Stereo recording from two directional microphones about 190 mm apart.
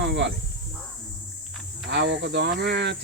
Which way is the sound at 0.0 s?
70° right (ahead or behind).